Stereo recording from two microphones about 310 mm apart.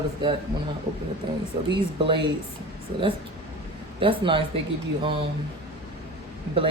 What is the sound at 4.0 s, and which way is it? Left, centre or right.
Speech, centre.